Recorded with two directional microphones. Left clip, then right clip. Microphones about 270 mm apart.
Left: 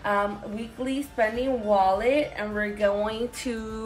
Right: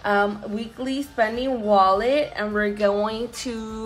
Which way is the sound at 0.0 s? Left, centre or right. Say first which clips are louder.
Right 4 dB; centre.